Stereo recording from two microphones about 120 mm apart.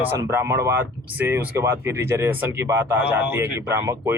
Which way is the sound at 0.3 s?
20° right (ahead or behind).